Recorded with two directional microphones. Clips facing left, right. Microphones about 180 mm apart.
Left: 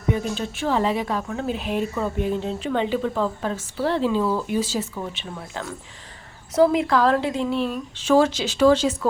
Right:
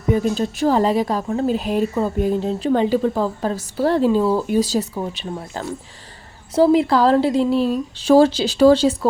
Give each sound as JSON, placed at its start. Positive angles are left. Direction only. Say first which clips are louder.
{"t": 0.1, "sound": "speech", "louder": "right 6 dB", "side_deg": -40}